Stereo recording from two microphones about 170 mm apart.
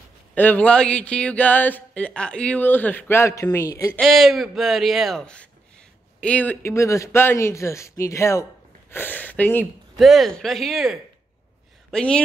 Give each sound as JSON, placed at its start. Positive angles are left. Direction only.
{"t": 0.3, "sound": "speech", "side_deg": 10}
{"t": 4.0, "sound": "a woman's voice", "side_deg": 0}